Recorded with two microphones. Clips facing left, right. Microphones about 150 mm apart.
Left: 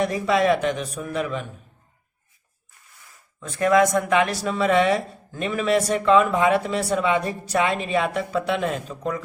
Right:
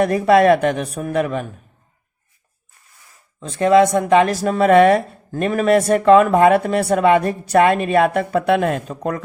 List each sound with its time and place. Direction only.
0.0 s speech: 55° right (ahead or behind)
3.4 s speech: 30° right (ahead or behind); by 9.2 s 55° right (ahead or behind)